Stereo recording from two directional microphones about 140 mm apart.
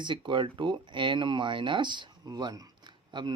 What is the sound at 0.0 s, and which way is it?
Speech, 35° right (ahead or behind).